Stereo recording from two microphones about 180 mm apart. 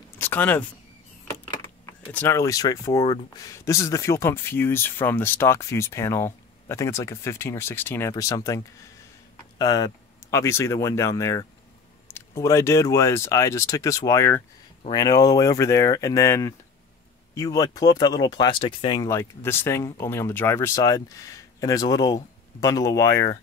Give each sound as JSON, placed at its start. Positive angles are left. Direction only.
{"t": 0.2, "sound": "speech", "side_deg": 10}
{"t": 2.1, "sound": "speech", "side_deg": 15}
{"t": 19.0, "sound": "speech", "side_deg": 15}